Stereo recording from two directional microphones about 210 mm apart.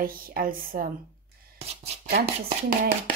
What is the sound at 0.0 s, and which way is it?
Speech, 45° right (ahead or behind).